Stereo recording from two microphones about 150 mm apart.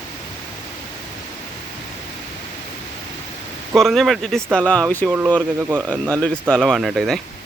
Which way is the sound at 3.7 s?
Centre (ahead or behind).